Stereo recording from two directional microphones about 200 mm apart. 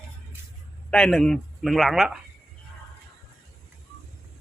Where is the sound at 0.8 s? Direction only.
5° left (ahead or behind).